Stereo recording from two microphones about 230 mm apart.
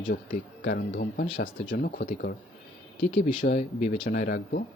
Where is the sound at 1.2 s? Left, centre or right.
Left.